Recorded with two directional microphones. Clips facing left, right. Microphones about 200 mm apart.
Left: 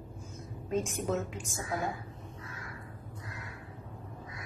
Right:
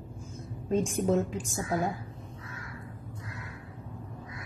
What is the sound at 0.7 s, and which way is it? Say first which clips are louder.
A woman's voice: right 5 dB; 30° right (ahead or behind).